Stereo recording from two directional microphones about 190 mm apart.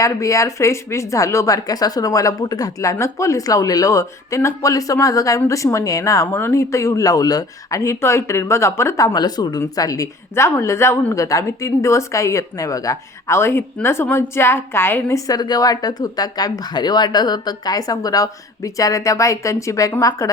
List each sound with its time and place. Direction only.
0.0 s speech: 15° left (ahead or behind)